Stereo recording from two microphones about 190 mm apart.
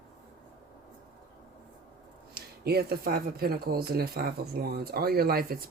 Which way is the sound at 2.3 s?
55° right (ahead or behind).